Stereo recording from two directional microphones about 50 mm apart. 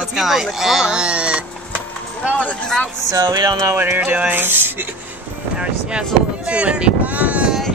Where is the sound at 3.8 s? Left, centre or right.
Right.